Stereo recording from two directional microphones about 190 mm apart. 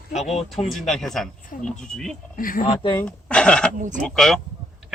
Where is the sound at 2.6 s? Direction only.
25° left (ahead or behind).